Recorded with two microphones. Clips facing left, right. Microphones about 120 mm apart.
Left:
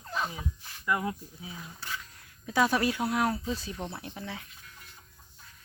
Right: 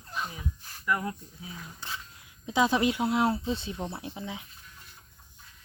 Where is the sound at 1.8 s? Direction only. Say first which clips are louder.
Left 1 dB; 20° right (ahead or behind).